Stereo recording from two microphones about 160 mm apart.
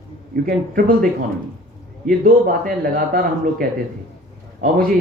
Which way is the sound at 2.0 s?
60° right (ahead or behind).